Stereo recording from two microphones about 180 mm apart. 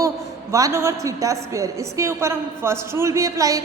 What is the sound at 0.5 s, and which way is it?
A woman's voice, 15° right (ahead or behind).